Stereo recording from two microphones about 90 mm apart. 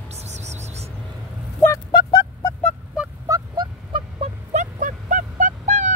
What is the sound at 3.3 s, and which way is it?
Fowl, 40° right (ahead or behind).